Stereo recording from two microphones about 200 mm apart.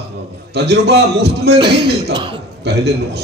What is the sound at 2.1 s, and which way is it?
Speech, 25° right (ahead or behind).